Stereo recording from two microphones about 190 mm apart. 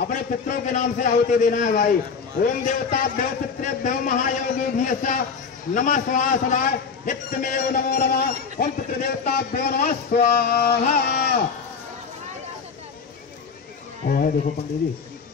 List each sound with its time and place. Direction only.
0.0 s a man's voice: 45° left (ahead or behind)
14.0 s a man's voice: 50° left (ahead or behind)